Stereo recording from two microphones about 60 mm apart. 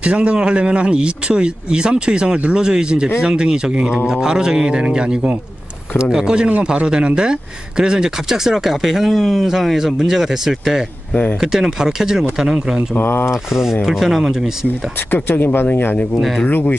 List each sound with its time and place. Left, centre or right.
0.0 s speech: centre
12.9 s speech: left
13.3 s speech: centre
15.0 s speech: left